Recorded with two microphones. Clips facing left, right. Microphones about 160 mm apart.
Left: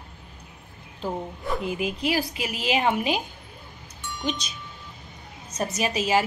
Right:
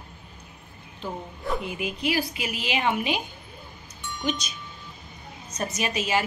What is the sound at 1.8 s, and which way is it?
A woman's voice, 35° left (ahead or behind).